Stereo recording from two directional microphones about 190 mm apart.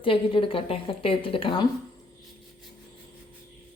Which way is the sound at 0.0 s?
30° left (ahead or behind).